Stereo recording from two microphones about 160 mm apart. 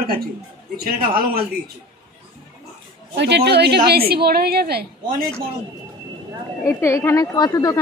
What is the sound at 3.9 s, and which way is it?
Speech, 75° right (ahead or behind).